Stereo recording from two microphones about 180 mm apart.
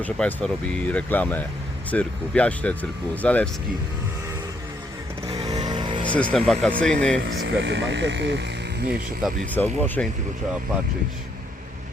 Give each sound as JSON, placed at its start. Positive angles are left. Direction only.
{"t": 0.0, "sound": "speech", "side_deg": 5}
{"t": 5.3, "sound": "music", "side_deg": -25}
{"t": 6.3, "sound": "speech", "side_deg": 5}
{"t": 7.3, "sound": "speech", "side_deg": -70}
{"t": 9.6, "sound": "speech", "side_deg": 10}